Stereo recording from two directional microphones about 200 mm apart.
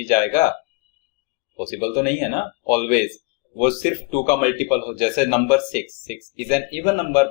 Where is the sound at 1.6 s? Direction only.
40° left (ahead or behind).